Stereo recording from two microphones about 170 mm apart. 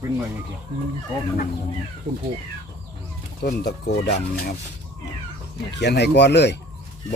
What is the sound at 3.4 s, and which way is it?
Speech, 70° left (ahead or behind).